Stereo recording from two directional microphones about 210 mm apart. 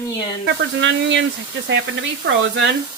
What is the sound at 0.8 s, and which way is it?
Speech, 60° right (ahead or behind).